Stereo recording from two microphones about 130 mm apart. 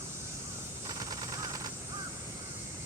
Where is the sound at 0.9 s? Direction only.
30° right (ahead or behind).